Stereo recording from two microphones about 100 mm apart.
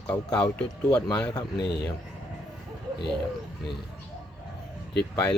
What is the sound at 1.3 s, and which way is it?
Speech, 45° left (ahead or behind).